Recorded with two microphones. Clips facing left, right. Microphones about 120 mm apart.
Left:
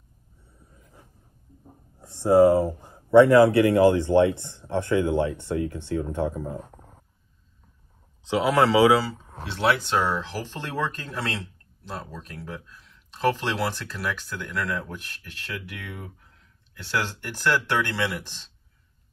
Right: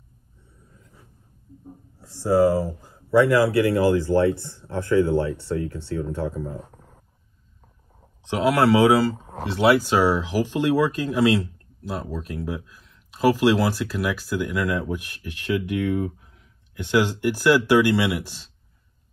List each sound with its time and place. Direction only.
2.0 s speech: 20° left (ahead or behind)
9.1 s a sound: 45° right (ahead or behind)
9.4 s speech: centre (ahead or behind)